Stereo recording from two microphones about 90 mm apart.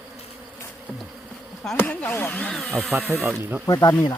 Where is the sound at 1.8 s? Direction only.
20° left (ahead or behind).